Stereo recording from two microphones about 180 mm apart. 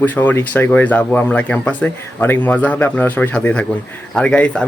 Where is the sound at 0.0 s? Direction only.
10° left (ahead or behind).